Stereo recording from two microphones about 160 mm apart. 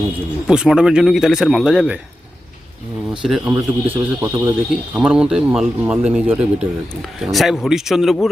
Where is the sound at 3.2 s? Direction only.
5° right (ahead or behind).